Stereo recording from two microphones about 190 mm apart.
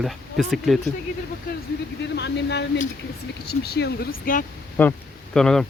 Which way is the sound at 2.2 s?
65° left (ahead or behind).